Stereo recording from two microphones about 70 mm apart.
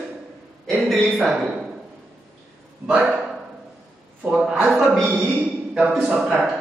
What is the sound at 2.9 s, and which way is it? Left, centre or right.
Speech, centre.